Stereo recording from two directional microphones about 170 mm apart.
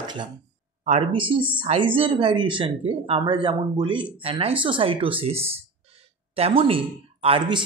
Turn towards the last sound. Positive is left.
turn(degrees=-30)  # may be behind; listen again after turning